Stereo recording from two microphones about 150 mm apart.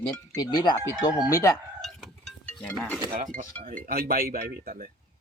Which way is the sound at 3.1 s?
55° right (ahead or behind).